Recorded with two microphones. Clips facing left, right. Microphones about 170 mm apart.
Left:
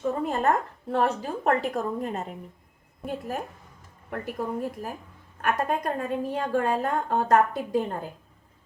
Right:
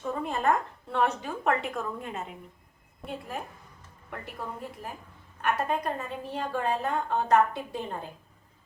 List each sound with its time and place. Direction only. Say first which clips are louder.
0.0 s a woman's voice: left 4 dB; 40° left (ahead or behind)